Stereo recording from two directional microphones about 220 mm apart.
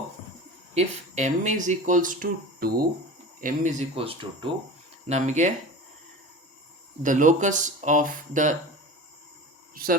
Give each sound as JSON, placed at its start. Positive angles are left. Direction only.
{"t": 0.7, "sound": "speech", "side_deg": -30}
{"t": 3.4, "sound": "speech", "side_deg": -35}
{"t": 7.0, "sound": "speech", "side_deg": -35}
{"t": 9.7, "sound": "speech", "side_deg": -40}